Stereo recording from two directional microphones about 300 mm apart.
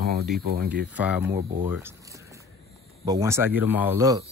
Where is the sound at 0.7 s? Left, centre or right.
Centre.